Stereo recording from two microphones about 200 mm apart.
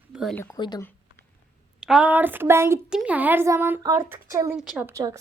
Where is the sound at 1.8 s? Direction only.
5° right (ahead or behind).